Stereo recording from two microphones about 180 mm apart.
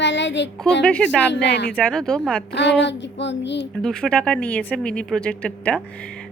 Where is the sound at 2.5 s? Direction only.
75° left (ahead or behind).